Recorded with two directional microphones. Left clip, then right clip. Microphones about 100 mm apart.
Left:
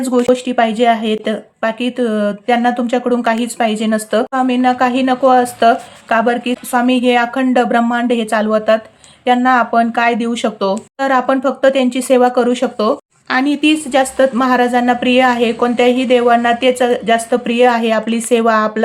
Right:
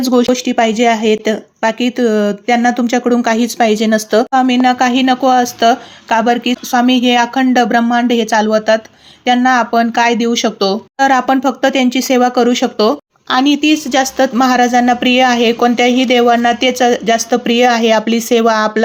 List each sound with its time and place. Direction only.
0.3 s speech: 20° right (ahead or behind)